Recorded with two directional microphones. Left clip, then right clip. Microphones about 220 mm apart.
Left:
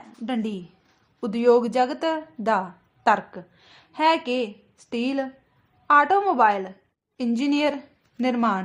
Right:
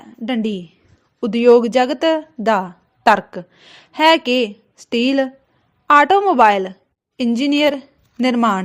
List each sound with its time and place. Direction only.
0.3 s a woman's voice: 25° right (ahead or behind)